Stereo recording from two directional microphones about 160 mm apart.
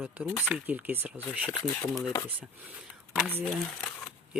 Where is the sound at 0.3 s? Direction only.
10° left (ahead or behind).